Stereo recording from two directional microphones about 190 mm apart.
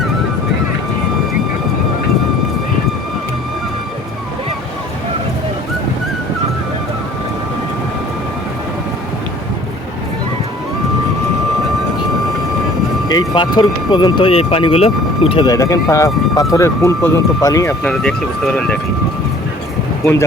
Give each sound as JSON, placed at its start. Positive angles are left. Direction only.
{"t": 13.1, "sound": "speech", "side_deg": 25}